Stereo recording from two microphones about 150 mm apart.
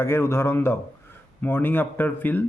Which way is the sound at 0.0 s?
15° left (ahead or behind).